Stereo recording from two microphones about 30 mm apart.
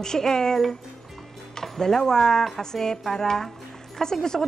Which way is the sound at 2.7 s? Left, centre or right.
Centre.